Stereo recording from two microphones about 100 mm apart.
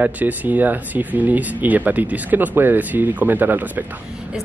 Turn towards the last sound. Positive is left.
turn(degrees=-20)  # may be behind; listen again after turning